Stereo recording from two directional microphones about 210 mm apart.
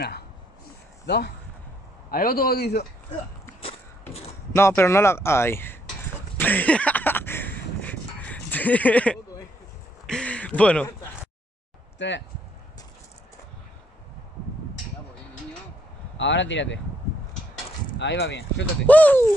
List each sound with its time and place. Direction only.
1.0 s speech: 55° left (ahead or behind)
4.5 s speech: 10° left (ahead or behind)
6.3 s a sound: 10° left (ahead or behind)
12.0 s speech: 60° left (ahead or behind)
16.2 s speech: 60° left (ahead or behind)
17.9 s speech: 55° left (ahead or behind)
18.9 s speech: 5° left (ahead or behind)